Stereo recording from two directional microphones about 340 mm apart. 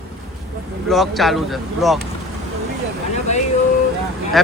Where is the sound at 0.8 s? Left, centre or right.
Centre.